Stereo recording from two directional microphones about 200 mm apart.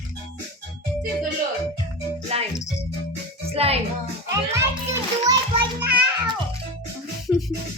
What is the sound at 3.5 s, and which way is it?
Speech, 30° right (ahead or behind).